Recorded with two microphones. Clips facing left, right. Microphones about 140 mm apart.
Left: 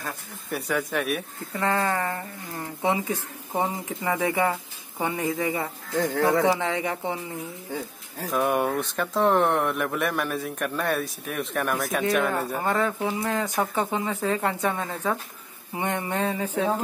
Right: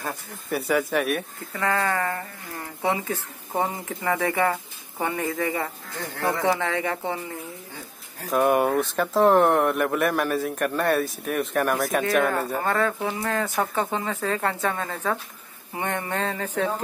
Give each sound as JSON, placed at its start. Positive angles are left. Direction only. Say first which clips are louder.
{"t": 0.5, "sound": "a man's voice", "louder": "right 4 dB", "side_deg": 0}
{"t": 1.5, "sound": "speech", "louder": "even", "side_deg": 20}
{"t": 8.3, "sound": "a man's voice", "louder": "right 3 dB", "side_deg": 0}
{"t": 12.7, "sound": "speech", "louder": "even", "side_deg": 20}